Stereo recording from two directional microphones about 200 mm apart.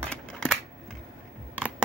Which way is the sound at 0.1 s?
5° left (ahead or behind).